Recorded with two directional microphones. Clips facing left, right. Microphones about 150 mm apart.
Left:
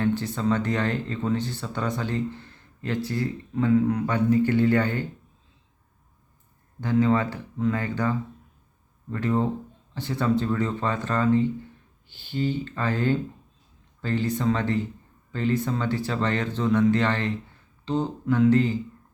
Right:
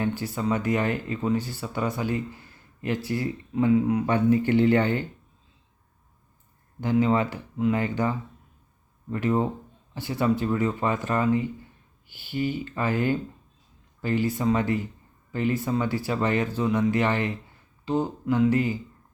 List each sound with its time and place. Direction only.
0.0 s speech: 5° right (ahead or behind)
6.8 s speech: 15° right (ahead or behind)